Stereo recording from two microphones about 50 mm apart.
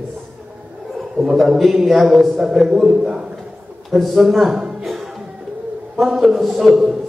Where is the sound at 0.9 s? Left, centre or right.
Centre.